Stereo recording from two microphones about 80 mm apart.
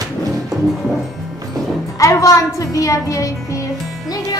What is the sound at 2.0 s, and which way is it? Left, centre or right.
A woman's voice, left.